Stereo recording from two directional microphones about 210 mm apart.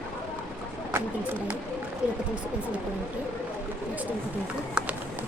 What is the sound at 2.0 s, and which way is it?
Speech, 5° right (ahead or behind).